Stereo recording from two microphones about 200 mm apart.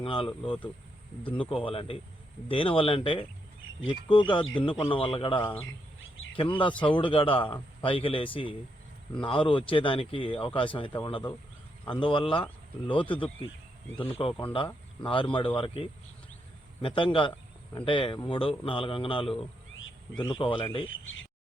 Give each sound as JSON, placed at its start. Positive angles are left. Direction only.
{"t": 0.0, "sound": "speech", "side_deg": 25}
{"t": 1.4, "sound": "speech", "side_deg": 25}
{"t": 6.0, "sound": "a sound", "side_deg": 75}
{"t": 6.3, "sound": "speech", "side_deg": 25}
{"t": 20.8, "sound": "speech", "side_deg": 75}